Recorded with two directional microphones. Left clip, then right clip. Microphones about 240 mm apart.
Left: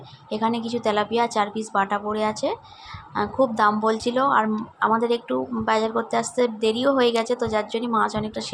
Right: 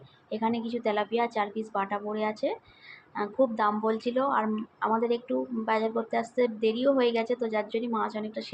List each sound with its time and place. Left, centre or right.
0.3 s a woman's voice: left